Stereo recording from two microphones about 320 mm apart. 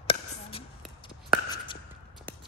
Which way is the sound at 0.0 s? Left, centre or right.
Centre.